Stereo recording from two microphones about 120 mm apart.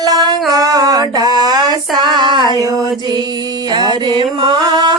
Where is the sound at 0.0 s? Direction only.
35° right (ahead or behind).